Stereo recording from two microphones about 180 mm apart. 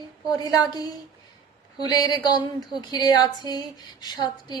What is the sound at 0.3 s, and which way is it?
Speech, 20° left (ahead or behind).